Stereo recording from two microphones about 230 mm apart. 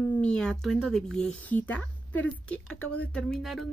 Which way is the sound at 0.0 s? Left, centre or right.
Centre.